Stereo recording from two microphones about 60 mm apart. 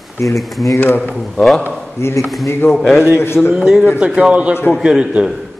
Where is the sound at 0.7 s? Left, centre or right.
Left.